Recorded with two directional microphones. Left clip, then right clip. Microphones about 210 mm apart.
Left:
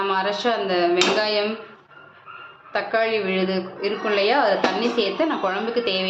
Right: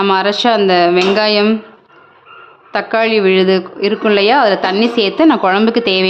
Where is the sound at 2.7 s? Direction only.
55° right (ahead or behind).